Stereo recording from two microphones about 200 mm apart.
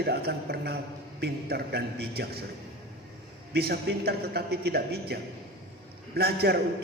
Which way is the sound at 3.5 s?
50° right (ahead or behind).